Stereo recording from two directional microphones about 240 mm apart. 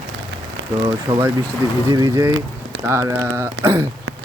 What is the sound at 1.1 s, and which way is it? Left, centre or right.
Speech, centre.